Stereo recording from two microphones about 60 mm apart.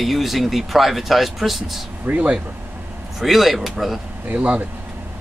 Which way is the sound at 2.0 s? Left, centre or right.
Right.